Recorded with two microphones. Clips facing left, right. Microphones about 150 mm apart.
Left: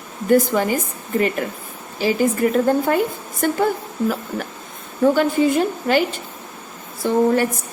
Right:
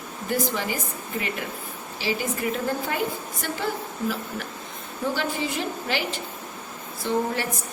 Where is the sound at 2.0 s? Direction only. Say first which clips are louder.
Left 10 dB; 50° left (ahead or behind).